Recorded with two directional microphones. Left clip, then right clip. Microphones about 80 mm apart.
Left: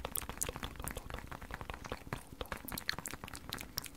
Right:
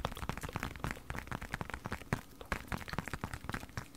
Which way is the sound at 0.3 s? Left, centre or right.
Right.